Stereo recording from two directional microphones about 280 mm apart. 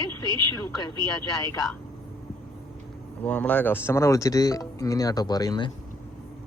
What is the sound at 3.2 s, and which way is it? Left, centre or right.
Speech, centre.